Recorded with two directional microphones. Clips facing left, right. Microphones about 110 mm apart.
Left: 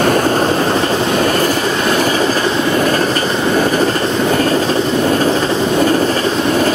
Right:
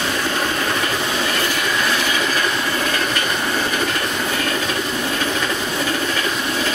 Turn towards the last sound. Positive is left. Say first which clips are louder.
# left 9 dB
turn(degrees=45)  # may be behind; listen again after turning